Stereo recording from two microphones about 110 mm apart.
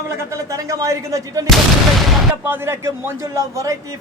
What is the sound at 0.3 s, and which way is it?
Speech, 30° right (ahead or behind).